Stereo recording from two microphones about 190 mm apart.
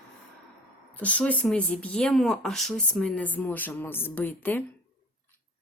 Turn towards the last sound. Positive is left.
turn(degrees=10)  # may be behind; listen again after turning